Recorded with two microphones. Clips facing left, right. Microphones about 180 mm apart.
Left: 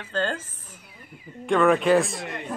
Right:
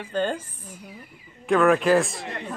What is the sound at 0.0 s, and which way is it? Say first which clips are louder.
Speech: right 2 dB; 15° right (ahead or behind).